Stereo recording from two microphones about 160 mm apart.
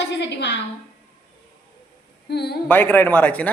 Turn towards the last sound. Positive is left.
turn(degrees=10)  # may be behind; listen again after turning